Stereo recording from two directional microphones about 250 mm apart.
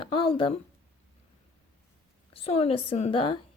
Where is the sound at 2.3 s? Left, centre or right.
Left.